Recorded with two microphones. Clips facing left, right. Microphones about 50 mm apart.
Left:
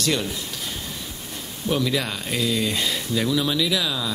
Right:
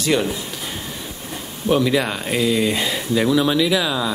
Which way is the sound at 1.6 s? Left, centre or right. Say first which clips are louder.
Right 6 dB; centre.